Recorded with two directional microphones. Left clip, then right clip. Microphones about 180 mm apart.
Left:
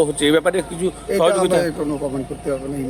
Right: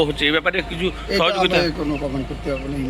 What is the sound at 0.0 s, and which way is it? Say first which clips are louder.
A man's voice: left 2 dB; 35° left (ahead or behind).